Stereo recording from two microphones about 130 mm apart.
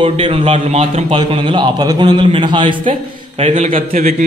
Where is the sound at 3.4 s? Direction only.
55° right (ahead or behind).